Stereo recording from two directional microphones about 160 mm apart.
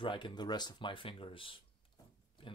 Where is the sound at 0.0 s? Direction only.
30° left (ahead or behind).